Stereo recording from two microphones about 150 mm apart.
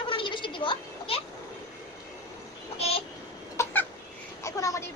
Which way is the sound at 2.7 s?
40° left (ahead or behind).